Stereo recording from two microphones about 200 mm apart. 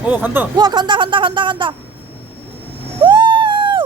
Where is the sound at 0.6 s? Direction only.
20° right (ahead or behind).